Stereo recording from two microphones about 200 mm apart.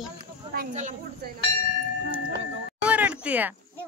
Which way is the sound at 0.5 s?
40° right (ahead or behind).